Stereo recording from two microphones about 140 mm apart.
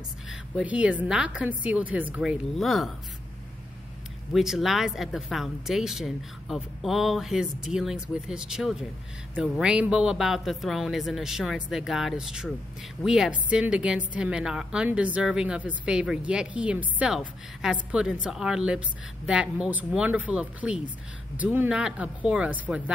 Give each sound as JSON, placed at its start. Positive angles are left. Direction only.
{"t": 0.3, "sound": "a sound", "side_deg": -5}
{"t": 1.0, "sound": "a woman's voice", "side_deg": -5}
{"t": 2.5, "sound": "speech", "side_deg": 0}
{"t": 4.3, "sound": "a woman's voice", "side_deg": 0}